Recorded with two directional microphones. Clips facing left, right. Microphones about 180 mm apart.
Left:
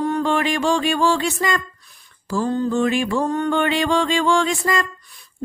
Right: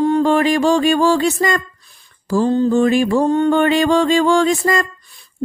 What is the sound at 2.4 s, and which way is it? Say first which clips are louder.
Female singing: right 5 dB; 30° right (ahead or behind).